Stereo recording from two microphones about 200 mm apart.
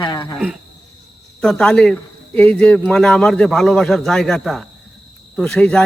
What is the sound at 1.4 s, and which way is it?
Speech, 5° left (ahead or behind).